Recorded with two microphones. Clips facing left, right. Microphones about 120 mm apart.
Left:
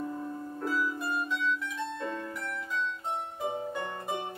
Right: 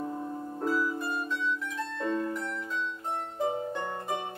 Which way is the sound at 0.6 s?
30° right (ahead or behind).